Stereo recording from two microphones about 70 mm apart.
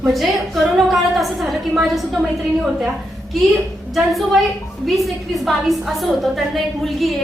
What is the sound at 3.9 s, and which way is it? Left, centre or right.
A woman's voice, centre.